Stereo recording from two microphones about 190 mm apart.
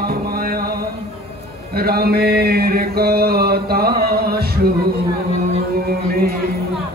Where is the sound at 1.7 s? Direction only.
55° right (ahead or behind).